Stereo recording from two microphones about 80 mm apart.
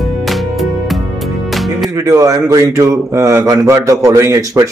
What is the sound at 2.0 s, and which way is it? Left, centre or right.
Speech, right.